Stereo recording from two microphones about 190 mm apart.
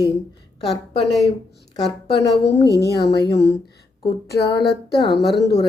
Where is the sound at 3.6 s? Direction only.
55° left (ahead or behind).